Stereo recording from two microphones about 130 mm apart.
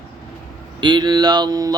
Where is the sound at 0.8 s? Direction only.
35° right (ahead or behind).